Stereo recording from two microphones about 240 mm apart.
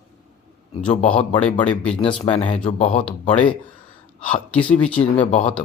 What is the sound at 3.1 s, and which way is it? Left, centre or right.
Speech, centre.